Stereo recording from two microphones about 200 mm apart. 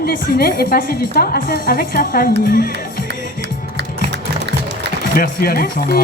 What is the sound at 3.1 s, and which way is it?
Music, 60° right (ahead or behind).